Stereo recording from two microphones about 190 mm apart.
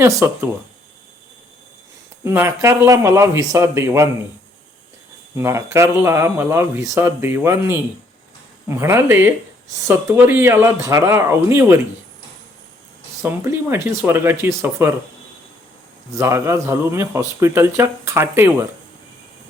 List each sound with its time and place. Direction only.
0.2 s speech: 15° right (ahead or behind)
2.2 s speech: 15° right (ahead or behind)
5.3 s speech: 15° right (ahead or behind)
13.2 s speech: 15° right (ahead or behind)
16.1 s speech: 15° right (ahead or behind)